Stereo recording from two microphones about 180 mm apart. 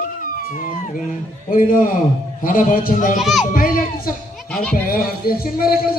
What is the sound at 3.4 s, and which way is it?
Speech, 50° left (ahead or behind).